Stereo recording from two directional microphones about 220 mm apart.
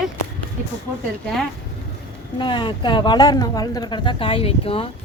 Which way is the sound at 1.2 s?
5° left (ahead or behind).